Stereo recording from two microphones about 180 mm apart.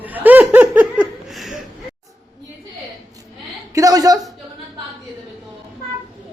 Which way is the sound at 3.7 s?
20° right (ahead or behind).